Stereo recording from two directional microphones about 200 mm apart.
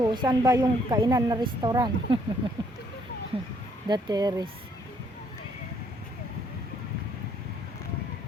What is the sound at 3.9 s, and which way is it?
Speech, 20° right (ahead or behind).